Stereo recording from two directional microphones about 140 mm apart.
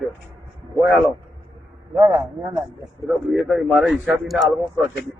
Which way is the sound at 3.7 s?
5° right (ahead or behind).